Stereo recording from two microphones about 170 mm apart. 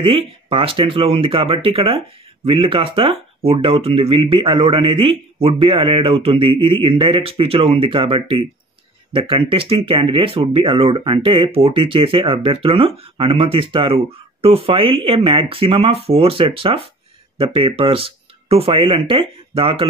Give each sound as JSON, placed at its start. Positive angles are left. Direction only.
{"t": 0.0, "sound": "speech", "side_deg": -30}